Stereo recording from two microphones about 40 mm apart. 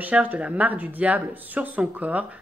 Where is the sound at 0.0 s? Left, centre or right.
Right.